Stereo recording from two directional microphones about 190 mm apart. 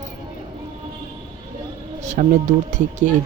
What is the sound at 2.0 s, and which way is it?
Speech, 40° right (ahead or behind).